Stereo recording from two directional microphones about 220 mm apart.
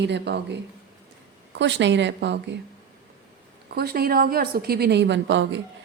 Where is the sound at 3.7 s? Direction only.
45° right (ahead or behind).